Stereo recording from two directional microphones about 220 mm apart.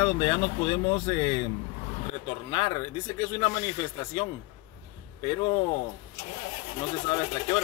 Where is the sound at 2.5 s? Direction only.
20° left (ahead or behind).